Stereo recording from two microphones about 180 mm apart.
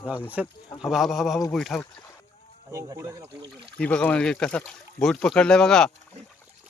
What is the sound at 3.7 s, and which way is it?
Speech, 5° left (ahead or behind).